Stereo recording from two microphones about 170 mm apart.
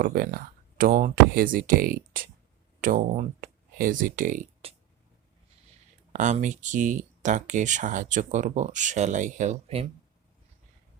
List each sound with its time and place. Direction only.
0.0 s speech: 60° right (ahead or behind)
6.1 s speech: 45° right (ahead or behind)